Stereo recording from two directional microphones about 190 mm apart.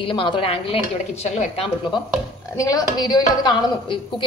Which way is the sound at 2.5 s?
15° left (ahead or behind).